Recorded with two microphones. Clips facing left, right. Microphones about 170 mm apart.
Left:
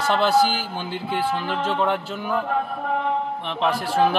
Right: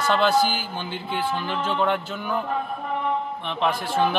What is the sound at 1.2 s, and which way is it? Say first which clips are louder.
Speech: left 1 dB; 30° left (ahead or behind).